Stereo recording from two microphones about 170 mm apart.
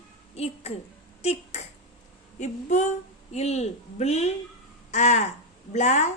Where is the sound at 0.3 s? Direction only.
35° left (ahead or behind).